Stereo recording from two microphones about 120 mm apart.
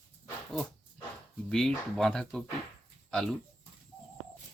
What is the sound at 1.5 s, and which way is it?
Speech, 5° left (ahead or behind).